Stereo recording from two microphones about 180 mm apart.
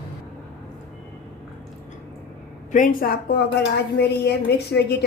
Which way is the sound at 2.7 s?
50° left (ahead or behind).